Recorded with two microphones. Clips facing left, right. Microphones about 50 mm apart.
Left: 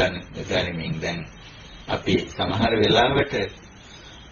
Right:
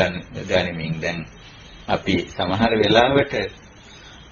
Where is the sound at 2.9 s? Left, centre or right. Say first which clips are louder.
Right 3 dB; right.